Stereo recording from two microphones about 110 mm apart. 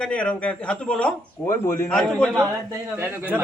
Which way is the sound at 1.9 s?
5° left (ahead or behind).